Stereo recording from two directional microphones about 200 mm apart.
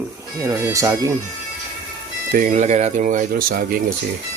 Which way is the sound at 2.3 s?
40° right (ahead or behind).